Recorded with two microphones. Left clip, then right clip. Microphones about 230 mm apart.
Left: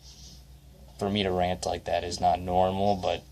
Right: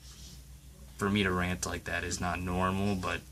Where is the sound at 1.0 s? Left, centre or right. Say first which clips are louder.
Left 4 dB; centre.